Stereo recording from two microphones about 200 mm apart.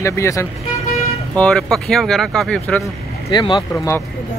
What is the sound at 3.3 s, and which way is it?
Speech, 25° left (ahead or behind).